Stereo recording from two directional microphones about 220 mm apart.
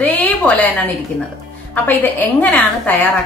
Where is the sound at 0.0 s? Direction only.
5° left (ahead or behind).